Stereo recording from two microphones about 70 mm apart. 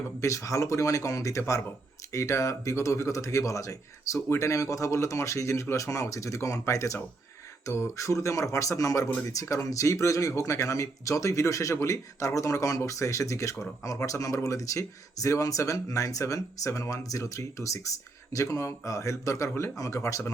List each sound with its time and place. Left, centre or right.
0.2 s speech: left